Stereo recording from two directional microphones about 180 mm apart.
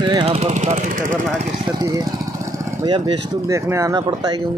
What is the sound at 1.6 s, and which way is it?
Speech, 20° right (ahead or behind).